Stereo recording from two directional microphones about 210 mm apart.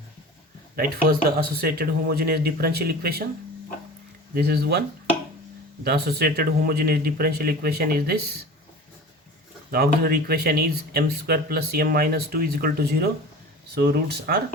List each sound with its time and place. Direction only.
0.8 s speech: 45° right (ahead or behind)
4.4 s speech: 50° right (ahead or behind)
5.8 s speech: 50° right (ahead or behind)
9.7 s speech: 45° right (ahead or behind)